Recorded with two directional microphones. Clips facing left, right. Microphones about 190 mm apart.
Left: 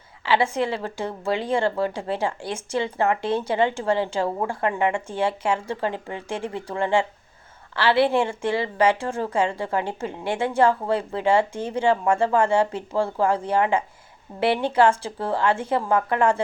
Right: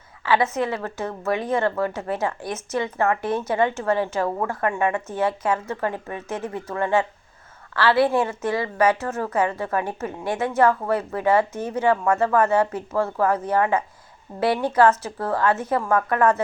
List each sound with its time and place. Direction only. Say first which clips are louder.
0.3 s a woman's voice: even; 30° left (ahead or behind)